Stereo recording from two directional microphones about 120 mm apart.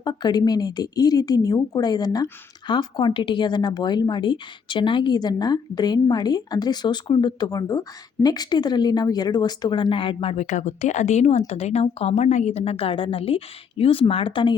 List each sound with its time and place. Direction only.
0.0 s speech: 35° left (ahead or behind)
10.4 s speech: 75° left (ahead or behind); by 14.5 s 45° left (ahead or behind)